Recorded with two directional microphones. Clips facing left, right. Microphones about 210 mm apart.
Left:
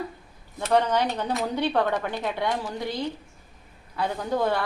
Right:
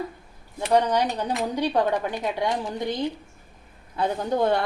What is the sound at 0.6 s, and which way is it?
Speech, 15° right (ahead or behind).